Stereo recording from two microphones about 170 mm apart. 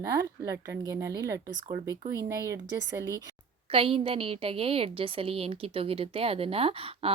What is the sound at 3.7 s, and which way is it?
A woman's voice, 35° right (ahead or behind).